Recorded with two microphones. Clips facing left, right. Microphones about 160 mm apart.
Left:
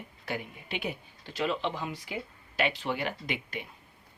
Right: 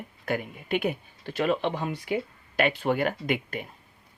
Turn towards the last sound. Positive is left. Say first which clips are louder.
# right 7 dB
turn(degrees=-50)  # may be behind; listen again after turning